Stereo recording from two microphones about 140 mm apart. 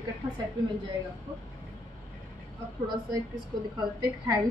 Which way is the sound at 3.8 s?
25° right (ahead or behind).